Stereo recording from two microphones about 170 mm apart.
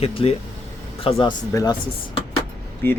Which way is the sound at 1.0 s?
25° left (ahead or behind).